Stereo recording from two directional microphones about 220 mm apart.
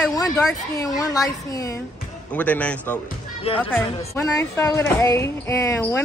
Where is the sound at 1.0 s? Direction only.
15° left (ahead or behind).